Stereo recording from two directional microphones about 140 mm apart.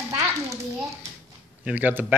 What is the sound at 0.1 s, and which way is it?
Children playing, 20° right (ahead or behind).